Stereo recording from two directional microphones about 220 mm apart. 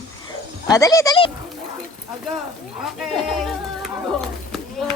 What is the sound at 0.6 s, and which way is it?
Speech, 15° left (ahead or behind).